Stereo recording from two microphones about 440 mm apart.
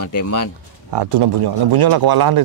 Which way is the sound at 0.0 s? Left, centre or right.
Left.